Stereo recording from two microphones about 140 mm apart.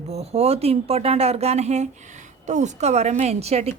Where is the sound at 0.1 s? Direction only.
45° right (ahead or behind).